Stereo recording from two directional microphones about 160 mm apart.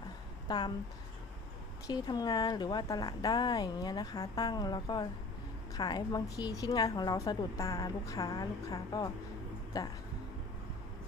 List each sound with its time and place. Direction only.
0.4 s a woman's voice: 25° left (ahead or behind)
1.9 s a woman's voice: 25° left (ahead or behind)